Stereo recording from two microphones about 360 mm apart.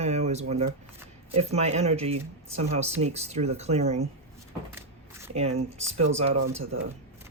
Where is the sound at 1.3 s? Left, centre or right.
Centre.